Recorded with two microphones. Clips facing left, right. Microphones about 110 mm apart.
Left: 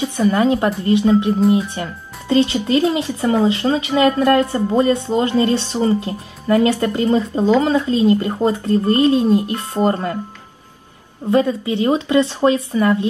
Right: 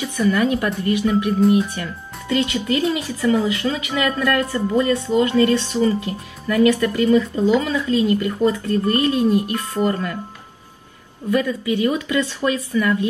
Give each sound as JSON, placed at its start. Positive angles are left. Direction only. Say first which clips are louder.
{"t": 0.3, "sound": "speech", "louder": "left 3 dB", "side_deg": 25}
{"t": 11.2, "sound": "speech", "louder": "left 3 dB", "side_deg": 30}